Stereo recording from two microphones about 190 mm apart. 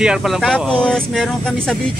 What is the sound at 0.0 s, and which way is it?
Speech, 5° right (ahead or behind).